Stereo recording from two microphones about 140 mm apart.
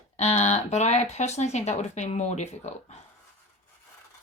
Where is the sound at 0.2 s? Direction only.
55° left (ahead or behind).